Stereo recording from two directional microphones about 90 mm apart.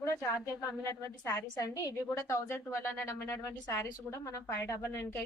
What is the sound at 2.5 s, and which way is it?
A woman's voice, 25° left (ahead or behind).